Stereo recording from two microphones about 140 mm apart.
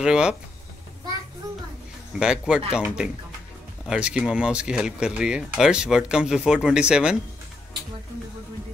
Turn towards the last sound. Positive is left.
turn(degrees=-5)  # may be behind; listen again after turning